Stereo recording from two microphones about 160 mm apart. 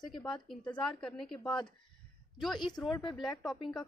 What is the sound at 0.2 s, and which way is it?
A woman's voice, 5° left (ahead or behind).